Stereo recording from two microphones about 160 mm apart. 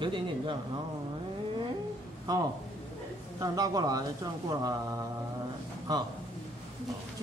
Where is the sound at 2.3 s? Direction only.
25° right (ahead or behind).